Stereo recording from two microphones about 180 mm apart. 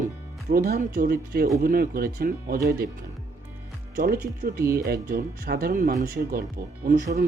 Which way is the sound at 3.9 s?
45° right (ahead or behind).